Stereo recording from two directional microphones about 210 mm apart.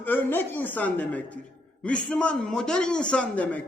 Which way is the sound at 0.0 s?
10° left (ahead or behind).